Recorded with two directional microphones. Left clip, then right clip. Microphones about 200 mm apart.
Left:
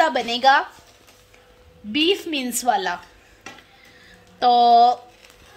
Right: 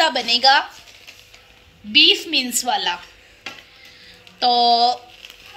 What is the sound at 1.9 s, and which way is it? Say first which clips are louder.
A woman's voice: right 7 dB; 50° left (ahead or behind).